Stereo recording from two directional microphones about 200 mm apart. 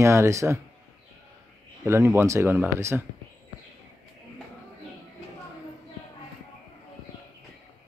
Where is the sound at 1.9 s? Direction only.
10° right (ahead or behind).